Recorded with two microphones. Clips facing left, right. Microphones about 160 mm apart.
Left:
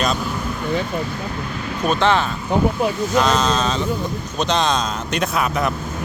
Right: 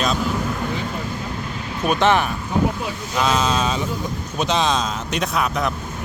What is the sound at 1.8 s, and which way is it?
Speech, 15° right (ahead or behind).